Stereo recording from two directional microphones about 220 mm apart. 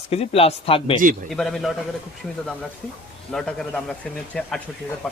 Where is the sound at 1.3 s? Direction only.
Centre (ahead or behind).